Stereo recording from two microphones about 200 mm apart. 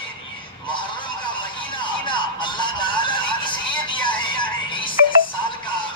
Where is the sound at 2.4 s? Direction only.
25° left (ahead or behind).